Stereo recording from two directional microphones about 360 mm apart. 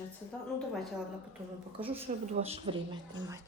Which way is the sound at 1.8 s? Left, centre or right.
Centre.